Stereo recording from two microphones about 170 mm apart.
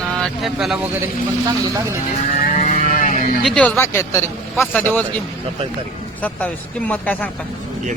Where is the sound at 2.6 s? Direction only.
50° left (ahead or behind).